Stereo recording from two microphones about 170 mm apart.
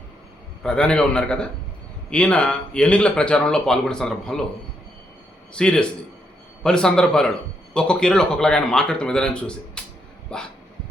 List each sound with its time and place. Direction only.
0.6 s speech: 5° left (ahead or behind)
5.5 s speech: 5° left (ahead or behind)